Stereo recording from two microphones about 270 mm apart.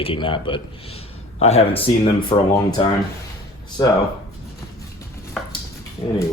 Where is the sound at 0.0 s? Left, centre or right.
Centre.